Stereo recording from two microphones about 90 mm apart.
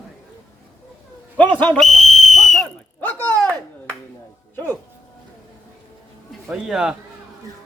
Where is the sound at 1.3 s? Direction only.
15° left (ahead or behind).